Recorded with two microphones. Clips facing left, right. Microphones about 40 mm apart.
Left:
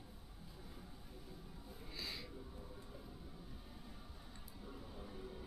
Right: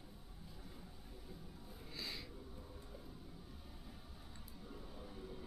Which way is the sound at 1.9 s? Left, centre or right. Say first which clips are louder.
Even; centre.